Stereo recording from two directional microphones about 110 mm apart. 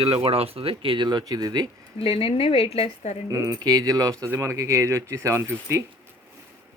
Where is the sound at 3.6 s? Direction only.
35° right (ahead or behind).